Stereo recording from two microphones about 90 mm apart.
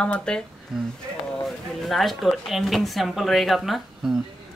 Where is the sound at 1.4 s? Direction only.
Centre (ahead or behind).